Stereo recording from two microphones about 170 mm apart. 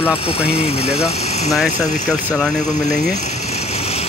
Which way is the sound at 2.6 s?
45° left (ahead or behind).